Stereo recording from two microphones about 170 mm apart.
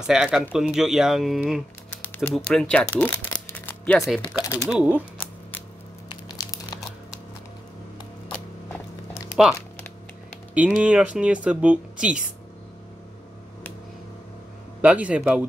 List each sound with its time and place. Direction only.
0.0 s speech: 5° right (ahead or behind)
2.0 s a sound: 10° left (ahead or behind)
2.3 s speech: 5° left (ahead or behind)
3.4 s music: 10° left (ahead or behind)
4.4 s speech: 15° left (ahead or behind)
4.7 s speech: 10° right (ahead or behind)
6.3 s crumpling: 20° left (ahead or behind)
9.4 s speech: 5° right (ahead or behind)
14.8 s speech: 10° right (ahead or behind)